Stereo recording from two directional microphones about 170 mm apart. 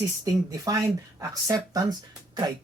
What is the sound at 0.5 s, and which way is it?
Speech, 20° right (ahead or behind).